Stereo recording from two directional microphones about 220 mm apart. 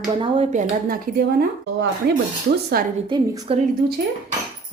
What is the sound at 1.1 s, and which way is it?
Speech, 35° right (ahead or behind).